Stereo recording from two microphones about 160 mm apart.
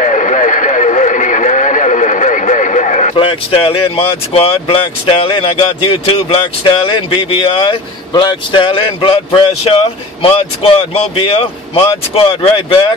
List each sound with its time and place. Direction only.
0.0 s radio: 50° left (ahead or behind)
3.2 s speech: 35° left (ahead or behind)